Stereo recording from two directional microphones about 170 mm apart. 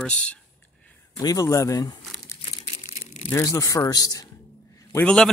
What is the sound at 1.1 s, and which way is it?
Speech, 20° left (ahead or behind).